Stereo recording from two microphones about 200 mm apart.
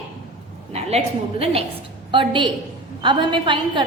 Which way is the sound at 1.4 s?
30° right (ahead or behind).